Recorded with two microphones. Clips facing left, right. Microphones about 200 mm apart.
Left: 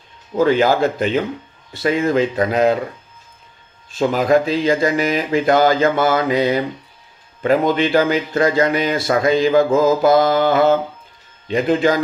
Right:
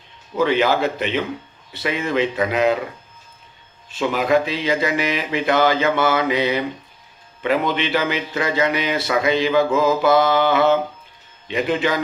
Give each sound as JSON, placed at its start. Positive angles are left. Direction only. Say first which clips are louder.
{"t": 0.3, "sound": "a man's voice", "louder": "left 3 dB", "side_deg": 45}
{"t": 3.9, "sound": "a man's voice", "louder": "left 3 dB", "side_deg": 40}